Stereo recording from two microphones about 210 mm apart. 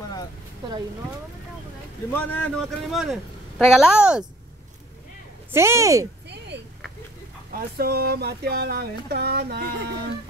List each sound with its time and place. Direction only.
2.1 s a man's voice: 5° left (ahead or behind)
5.5 s speech: 10° right (ahead or behind)
6.2 s a sound: 55° right (ahead or behind)
7.5 s speech: 45° right (ahead or behind)